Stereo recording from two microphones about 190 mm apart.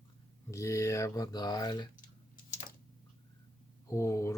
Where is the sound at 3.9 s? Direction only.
15° left (ahead or behind).